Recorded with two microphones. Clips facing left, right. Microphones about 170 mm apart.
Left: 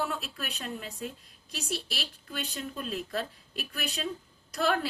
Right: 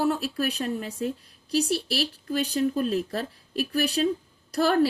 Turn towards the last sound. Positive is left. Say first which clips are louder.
# right 7 dB
turn(degrees=-35)  # may be behind; listen again after turning